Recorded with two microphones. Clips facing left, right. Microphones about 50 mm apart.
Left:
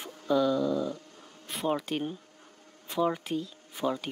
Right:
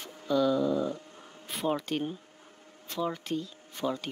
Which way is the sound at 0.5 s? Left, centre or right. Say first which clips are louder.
Right 1 dB; centre.